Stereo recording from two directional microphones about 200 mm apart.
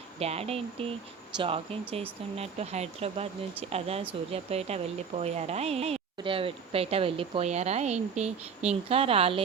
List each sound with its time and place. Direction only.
0.2 s speech: 30° right (ahead or behind)